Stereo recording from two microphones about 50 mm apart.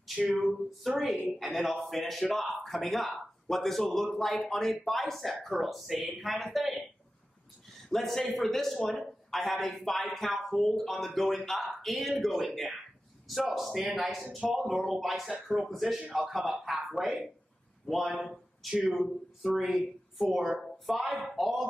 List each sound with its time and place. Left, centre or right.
0.8 s speech: centre
7.9 s speech: centre
13.5 s speech: centre
18.3 s a sound: centre
18.9 s speech: centre
20.5 s a sound: centre
20.8 s speech: centre